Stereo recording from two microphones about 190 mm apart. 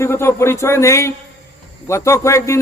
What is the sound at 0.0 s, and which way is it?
Speech, 15° left (ahead or behind).